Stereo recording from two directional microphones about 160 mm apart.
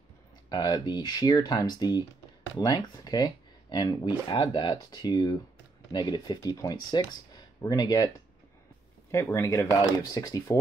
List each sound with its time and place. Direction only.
0.5 s speech: 25° left (ahead or behind)
9.1 s speech: 15° left (ahead or behind)